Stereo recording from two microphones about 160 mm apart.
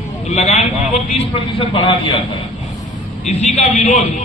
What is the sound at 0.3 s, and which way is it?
Speech, 45° left (ahead or behind).